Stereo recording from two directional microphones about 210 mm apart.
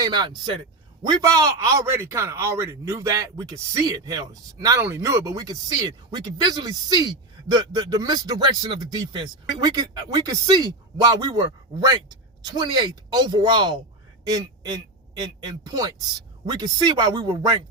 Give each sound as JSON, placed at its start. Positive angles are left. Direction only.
{"t": 0.0, "sound": "speech", "side_deg": -20}